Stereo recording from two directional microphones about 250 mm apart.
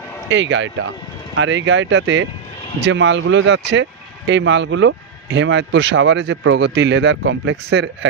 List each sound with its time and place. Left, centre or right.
0.3 s speech: right